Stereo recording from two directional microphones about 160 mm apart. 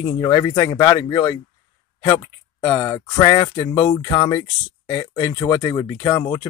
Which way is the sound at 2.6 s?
20° left (ahead or behind).